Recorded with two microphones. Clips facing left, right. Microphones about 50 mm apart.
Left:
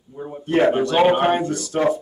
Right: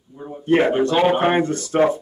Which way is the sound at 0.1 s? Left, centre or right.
Centre.